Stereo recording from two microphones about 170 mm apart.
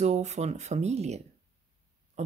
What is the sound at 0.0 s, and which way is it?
Speech, 40° right (ahead or behind).